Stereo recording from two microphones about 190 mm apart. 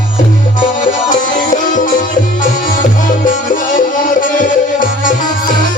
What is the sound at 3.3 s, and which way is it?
Music, 45° left (ahead or behind).